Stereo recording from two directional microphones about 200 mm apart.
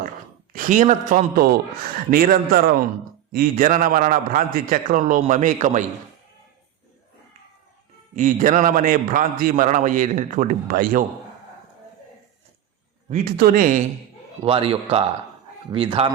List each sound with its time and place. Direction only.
0.5 s a man's voice: 40° right (ahead or behind)
8.1 s a man's voice: 40° right (ahead or behind)
13.1 s a man's voice: 40° right (ahead or behind)
14.4 s a man's voice: 25° right (ahead or behind)